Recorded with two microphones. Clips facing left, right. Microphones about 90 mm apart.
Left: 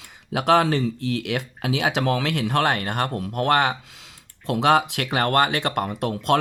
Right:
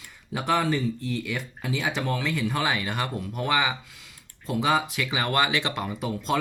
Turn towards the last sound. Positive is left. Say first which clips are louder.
# left 6 dB
turn(degrees=70)  # may be behind; listen again after turning